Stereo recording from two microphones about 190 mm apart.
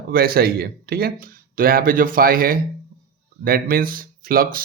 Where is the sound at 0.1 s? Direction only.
50° right (ahead or behind).